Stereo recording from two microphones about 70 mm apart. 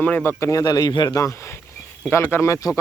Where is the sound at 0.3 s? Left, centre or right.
Left.